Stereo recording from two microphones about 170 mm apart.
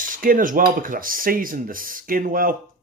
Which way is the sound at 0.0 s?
55° right (ahead or behind).